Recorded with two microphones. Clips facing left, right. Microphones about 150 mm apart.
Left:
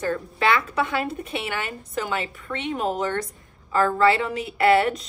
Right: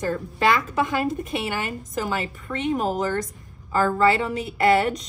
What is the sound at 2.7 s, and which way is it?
A woman's voice, centre (ahead or behind).